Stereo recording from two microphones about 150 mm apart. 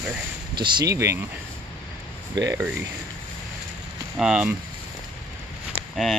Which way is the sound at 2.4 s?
25° right (ahead or behind).